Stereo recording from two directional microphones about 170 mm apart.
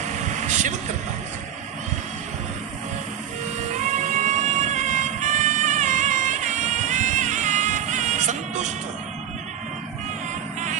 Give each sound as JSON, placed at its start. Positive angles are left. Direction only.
{"t": 0.0, "sound": "vehicle", "side_deg": -45}
{"t": 3.8, "sound": "music", "side_deg": -45}